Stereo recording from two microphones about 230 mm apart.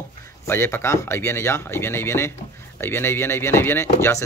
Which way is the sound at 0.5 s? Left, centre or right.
Centre.